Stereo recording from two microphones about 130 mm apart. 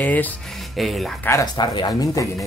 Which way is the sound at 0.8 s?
Centre (ahead or behind).